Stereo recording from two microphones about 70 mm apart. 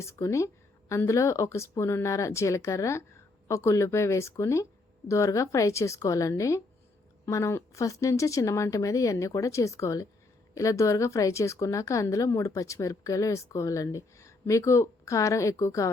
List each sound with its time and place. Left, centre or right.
0.0 s a woman's voice: left